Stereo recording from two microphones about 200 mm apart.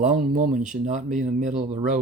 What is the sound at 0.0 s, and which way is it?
Speech, 40° right (ahead or behind).